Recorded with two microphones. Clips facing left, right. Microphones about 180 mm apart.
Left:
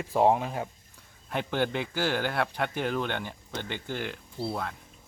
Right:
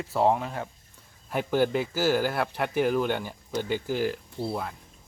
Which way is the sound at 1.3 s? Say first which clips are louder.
Right 4 dB; 5° right (ahead or behind).